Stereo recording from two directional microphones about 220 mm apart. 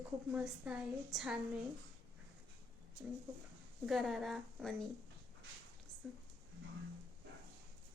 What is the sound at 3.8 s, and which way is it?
A woman's voice, centre (ahead or behind).